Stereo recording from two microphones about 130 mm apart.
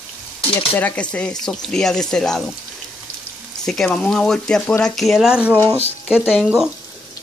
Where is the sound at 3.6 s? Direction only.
5° left (ahead or behind).